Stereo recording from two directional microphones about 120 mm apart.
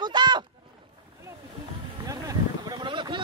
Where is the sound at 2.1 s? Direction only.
30° right (ahead or behind).